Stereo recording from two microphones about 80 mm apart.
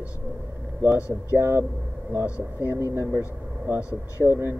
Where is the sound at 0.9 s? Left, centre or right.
Left.